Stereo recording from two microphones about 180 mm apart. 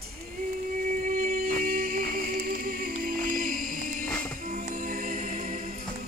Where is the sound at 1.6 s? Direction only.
55° right (ahead or behind).